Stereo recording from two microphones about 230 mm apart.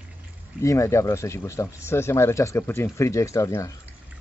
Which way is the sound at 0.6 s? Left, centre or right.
Centre.